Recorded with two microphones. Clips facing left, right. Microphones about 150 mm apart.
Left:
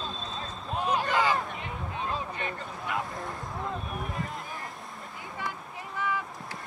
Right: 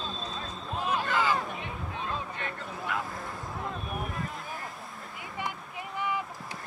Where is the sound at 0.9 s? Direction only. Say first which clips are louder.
Left 2 dB; 15° left (ahead or behind).